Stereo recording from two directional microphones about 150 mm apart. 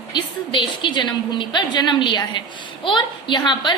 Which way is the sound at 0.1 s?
30° left (ahead or behind).